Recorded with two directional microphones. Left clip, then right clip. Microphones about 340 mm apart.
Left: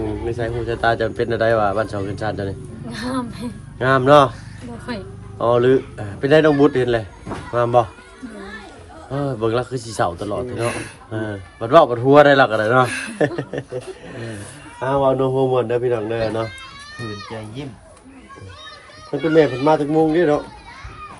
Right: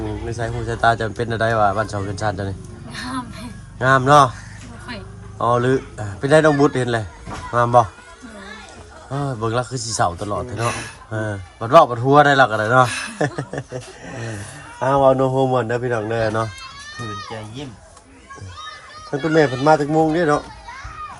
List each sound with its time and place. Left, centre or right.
0.3 s a man's voice: centre
2.9 s a child's voice: centre
3.8 s a man's voice: centre
4.9 s speech: centre
5.4 s a man's voice: centre
9.0 s a man's voice: centre
14.8 s speech: centre
19.2 s a man's voice: centre